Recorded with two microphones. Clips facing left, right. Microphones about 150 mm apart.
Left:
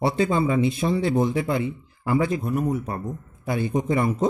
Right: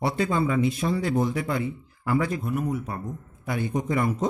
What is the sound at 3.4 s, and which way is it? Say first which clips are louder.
Speech: left 3 dB; 30° left (ahead or behind).